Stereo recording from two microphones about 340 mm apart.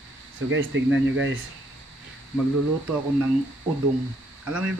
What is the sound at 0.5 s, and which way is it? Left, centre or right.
Speech, right.